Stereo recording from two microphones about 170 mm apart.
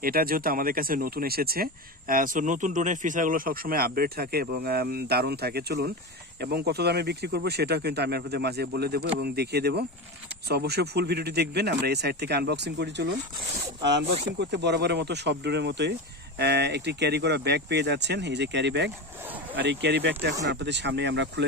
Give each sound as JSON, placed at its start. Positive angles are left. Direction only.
{"t": 0.0, "sound": "speech", "side_deg": -60}
{"t": 14.3, "sound": "speech", "side_deg": -90}